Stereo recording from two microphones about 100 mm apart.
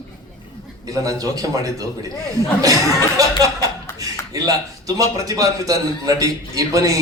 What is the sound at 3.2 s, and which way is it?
A man's voice, 35° right (ahead or behind).